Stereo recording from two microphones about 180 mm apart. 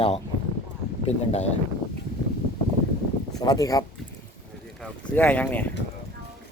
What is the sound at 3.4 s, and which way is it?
Speech, 20° left (ahead or behind).